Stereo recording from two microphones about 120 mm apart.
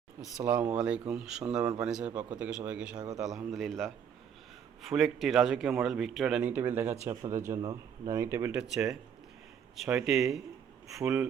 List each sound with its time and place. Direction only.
0.4 s speech: 10° right (ahead or behind)
7.0 s speech: 25° right (ahead or behind)
8.7 s speech: 5° right (ahead or behind)